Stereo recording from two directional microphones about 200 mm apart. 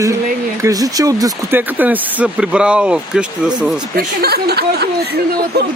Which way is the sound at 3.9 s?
50° right (ahead or behind).